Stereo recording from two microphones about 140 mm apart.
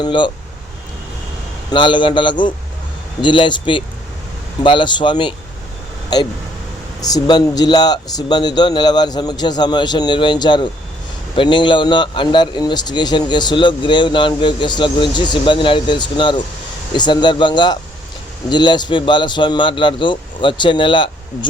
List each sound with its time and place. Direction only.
0.0 s a man's voice: 35° left (ahead or behind)
1.7 s a man's voice: 35° left (ahead or behind)
7.0 s a man's voice: 30° left (ahead or behind)